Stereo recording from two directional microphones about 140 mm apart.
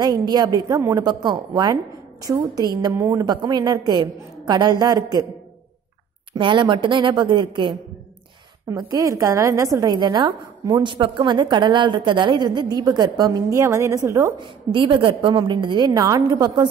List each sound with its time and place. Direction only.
0.0 s a woman's voice: 30° right (ahead or behind)
6.3 s a woman's voice: 35° right (ahead or behind)
8.6 s a woman's voice: 25° right (ahead or behind)
14.4 s a woman's voice: 35° right (ahead or behind)